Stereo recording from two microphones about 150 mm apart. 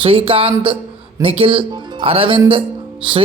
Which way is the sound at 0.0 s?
35° right (ahead or behind).